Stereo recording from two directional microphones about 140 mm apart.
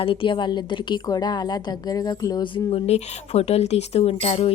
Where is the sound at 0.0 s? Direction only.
40° left (ahead or behind).